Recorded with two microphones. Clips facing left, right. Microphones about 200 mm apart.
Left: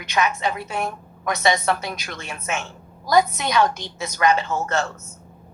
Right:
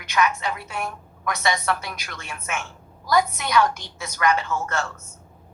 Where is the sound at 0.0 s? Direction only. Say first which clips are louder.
Left 1 dB; 20° left (ahead or behind).